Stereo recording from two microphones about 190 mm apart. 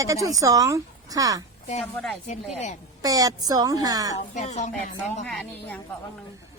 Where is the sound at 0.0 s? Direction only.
15° right (ahead or behind).